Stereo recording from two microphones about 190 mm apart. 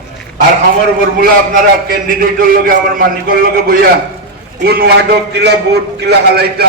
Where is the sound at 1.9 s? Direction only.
50° right (ahead or behind).